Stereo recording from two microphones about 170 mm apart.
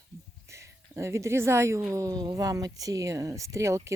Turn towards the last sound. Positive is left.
turn(degrees=-15)  # may be behind; listen again after turning